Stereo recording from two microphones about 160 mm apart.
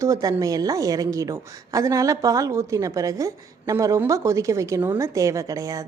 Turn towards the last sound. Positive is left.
turn(degrees=-20)  # may be behind; listen again after turning